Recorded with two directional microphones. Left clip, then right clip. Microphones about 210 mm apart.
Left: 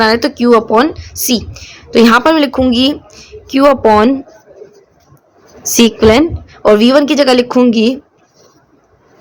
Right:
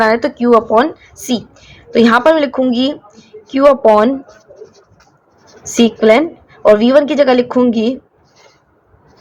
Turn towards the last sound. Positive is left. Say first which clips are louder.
# left 3 dB
turn(degrees=40)  # may be behind; listen again after turning